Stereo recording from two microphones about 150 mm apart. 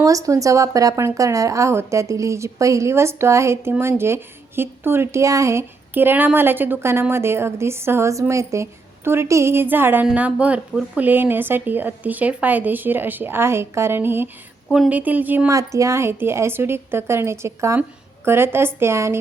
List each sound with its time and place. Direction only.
0.0 s speech: 20° right (ahead or behind)